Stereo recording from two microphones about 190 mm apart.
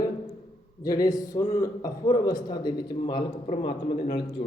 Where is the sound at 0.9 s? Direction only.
20° left (ahead or behind).